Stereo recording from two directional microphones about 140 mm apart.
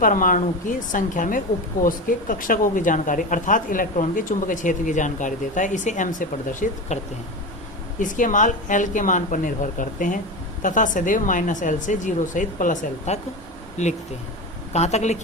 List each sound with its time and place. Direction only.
0.0 s speech: 75° left (ahead or behind)
1.8 s speech: 75° left (ahead or behind)
13.8 s speech: 50° left (ahead or behind)